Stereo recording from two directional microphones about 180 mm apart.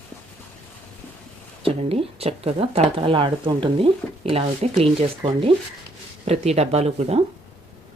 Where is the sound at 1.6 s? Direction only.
35° right (ahead or behind).